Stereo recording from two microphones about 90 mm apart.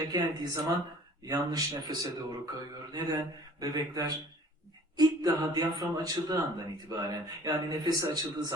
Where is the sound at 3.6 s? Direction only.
45° right (ahead or behind).